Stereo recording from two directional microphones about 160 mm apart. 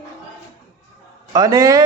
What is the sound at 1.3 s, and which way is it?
Speech, 20° right (ahead or behind).